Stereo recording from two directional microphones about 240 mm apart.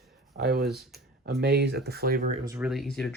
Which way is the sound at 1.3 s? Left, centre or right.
Right.